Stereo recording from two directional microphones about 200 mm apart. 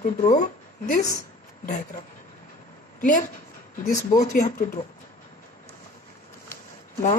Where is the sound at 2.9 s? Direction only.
40° left (ahead or behind).